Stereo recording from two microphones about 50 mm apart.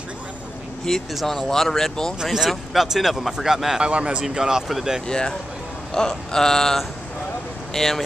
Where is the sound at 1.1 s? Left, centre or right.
Centre.